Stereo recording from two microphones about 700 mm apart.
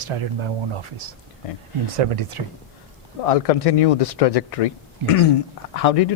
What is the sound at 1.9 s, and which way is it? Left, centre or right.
Speech, right.